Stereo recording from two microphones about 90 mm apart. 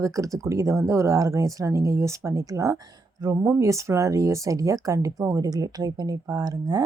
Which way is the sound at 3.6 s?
35° right (ahead or behind).